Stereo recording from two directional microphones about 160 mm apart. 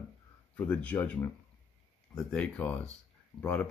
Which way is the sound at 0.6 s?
10° left (ahead or behind).